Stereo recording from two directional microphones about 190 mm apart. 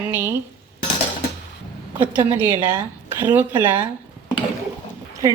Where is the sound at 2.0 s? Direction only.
10° right (ahead or behind).